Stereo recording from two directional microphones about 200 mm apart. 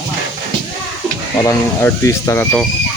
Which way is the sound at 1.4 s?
15° left (ahead or behind).